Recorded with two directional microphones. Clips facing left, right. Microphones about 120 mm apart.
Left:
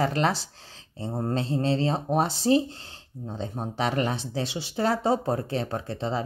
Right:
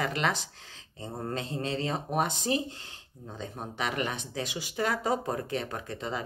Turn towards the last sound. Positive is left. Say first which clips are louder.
# left 6 dB
turn(degrees=30)  # may be behind; listen again after turning